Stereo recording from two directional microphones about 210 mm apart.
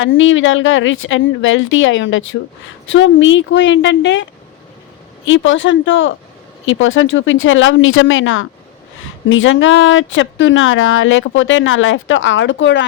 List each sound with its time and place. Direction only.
0.0 s speech: 70° left (ahead or behind)